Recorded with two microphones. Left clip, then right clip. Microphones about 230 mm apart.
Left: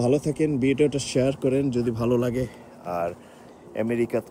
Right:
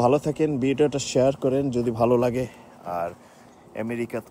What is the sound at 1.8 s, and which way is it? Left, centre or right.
Speech, centre.